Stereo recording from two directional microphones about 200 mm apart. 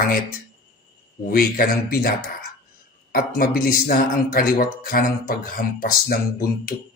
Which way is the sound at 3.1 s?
45° left (ahead or behind).